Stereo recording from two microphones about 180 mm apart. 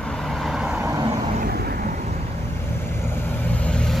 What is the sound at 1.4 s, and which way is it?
Vehicle, 60° right (ahead or behind).